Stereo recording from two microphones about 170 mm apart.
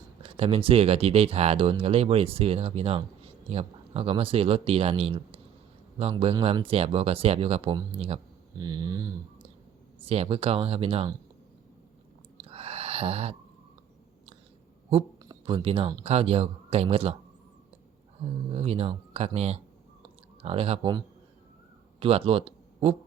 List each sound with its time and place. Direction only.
0.2 s speech: 35° right (ahead or behind)
8.6 s speech: 25° right (ahead or behind)
10.0 s speech: 35° right (ahead or behind)
12.5 s a sound: 35° right (ahead or behind)
15.2 s a sound: 25° right (ahead or behind)
16.0 s speech: 35° right (ahead or behind)
18.5 s speech: 35° right (ahead or behind)
22.0 s speech: 30° right (ahead or behind)